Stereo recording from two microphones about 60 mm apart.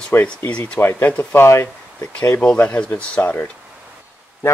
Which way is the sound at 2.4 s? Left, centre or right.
Left.